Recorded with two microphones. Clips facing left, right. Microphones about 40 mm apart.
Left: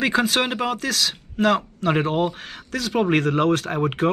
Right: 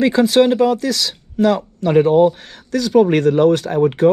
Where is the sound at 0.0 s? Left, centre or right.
Left.